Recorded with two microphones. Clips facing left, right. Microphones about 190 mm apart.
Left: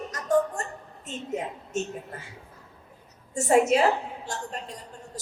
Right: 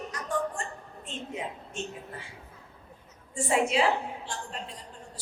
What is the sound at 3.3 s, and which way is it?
A woman's voice, 45° left (ahead or behind).